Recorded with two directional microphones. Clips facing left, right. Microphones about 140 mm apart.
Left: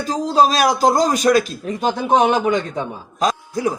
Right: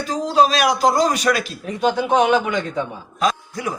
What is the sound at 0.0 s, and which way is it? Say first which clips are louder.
A man's voice: left 1 dB; 40° left (ahead or behind).